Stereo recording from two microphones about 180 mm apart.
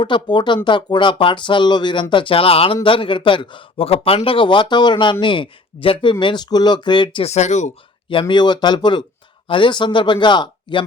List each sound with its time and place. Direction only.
0.0 s speech: 25° left (ahead or behind); by 7.7 s 40° left (ahead or behind)
8.1 s speech: 25° left (ahead or behind)